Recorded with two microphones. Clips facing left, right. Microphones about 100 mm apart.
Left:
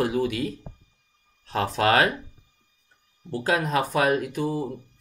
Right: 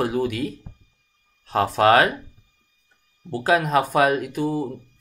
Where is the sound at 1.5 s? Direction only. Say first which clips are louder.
Right 5 dB; 55° right (ahead or behind).